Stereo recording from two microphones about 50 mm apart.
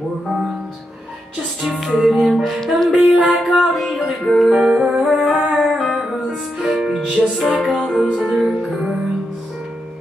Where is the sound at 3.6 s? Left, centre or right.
Centre.